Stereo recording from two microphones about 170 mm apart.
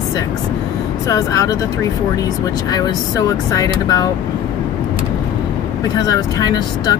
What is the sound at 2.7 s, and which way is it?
Speech, 20° left (ahead or behind).